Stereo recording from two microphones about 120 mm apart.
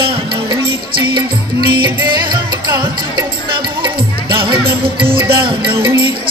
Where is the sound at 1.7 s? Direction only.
40° right (ahead or behind).